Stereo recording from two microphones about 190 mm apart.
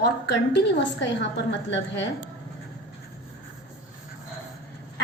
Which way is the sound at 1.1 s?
65° left (ahead or behind).